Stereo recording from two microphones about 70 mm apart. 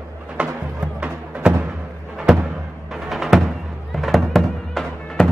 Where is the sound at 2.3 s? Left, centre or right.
Centre.